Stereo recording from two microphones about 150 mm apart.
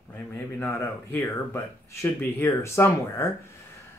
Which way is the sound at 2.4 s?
20° left (ahead or behind).